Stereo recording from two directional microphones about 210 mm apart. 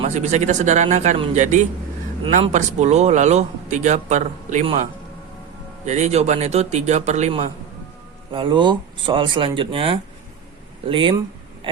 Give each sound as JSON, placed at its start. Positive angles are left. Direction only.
{"t": 0.0, "sound": "a man's voice", "side_deg": -35}